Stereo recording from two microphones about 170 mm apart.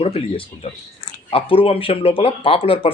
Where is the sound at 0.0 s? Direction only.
35° left (ahead or behind).